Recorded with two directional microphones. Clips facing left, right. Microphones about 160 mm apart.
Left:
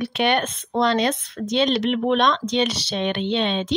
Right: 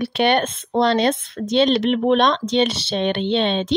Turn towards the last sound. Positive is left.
turn(degrees=-30)  # may be behind; listen again after turning